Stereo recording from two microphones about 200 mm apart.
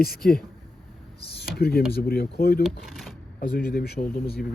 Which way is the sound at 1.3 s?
55° left (ahead or behind).